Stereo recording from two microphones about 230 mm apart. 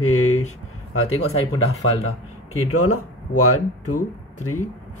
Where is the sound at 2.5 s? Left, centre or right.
Left.